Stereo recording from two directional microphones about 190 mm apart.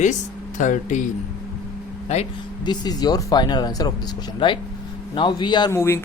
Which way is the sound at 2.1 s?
35° left (ahead or behind).